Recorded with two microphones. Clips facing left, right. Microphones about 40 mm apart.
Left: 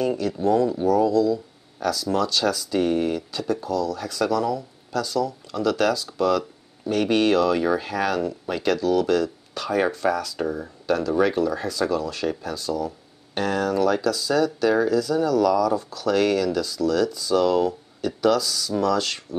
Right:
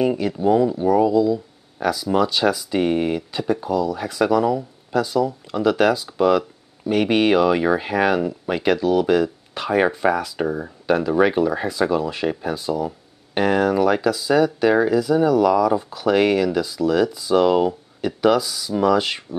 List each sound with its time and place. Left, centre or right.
0.0 s speech: centre